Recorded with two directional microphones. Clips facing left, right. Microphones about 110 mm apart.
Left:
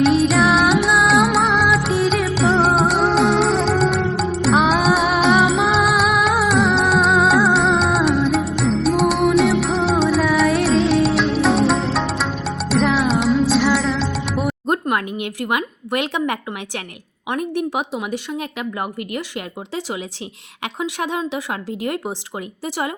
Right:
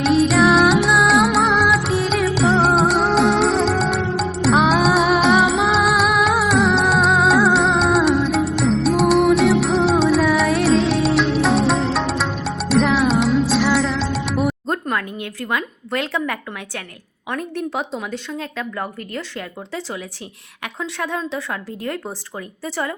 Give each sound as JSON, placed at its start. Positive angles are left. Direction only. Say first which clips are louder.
{"t": 0.0, "sound": "music", "louder": "even", "side_deg": 0}
{"t": 14.7, "sound": "a sound", "louder": "left 3 dB", "side_deg": 15}
{"t": 17.2, "sound": "a woman's voice", "louder": "left 3 dB", "side_deg": 15}
{"t": 20.6, "sound": "a woman's voice", "louder": "left 2 dB", "side_deg": 15}